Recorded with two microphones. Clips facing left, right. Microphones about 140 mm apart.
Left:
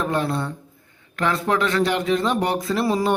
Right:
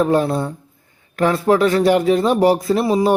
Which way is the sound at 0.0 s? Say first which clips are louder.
Right 7 dB; 35° right (ahead or behind).